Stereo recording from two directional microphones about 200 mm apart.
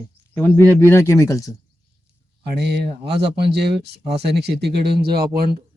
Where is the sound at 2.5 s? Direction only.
55° right (ahead or behind).